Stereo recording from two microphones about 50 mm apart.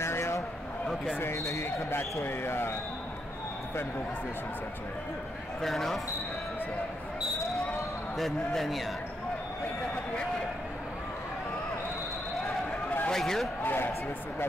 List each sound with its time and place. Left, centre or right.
0.0 s a sound: left
1.4 s speech: left
2.1 s speech: left
5.6 s a man's voice: centre
8.2 s a man's voice: centre
13.1 s speech: centre
13.6 s a man's voice: left